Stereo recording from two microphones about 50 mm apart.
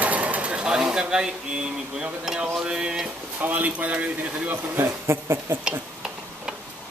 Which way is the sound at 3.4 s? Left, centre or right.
Right.